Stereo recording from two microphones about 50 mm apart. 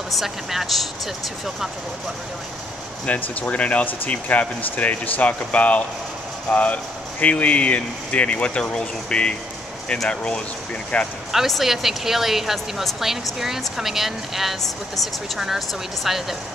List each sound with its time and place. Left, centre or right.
0.1 s speech: centre
3.1 s speech: left
11.3 s speech: centre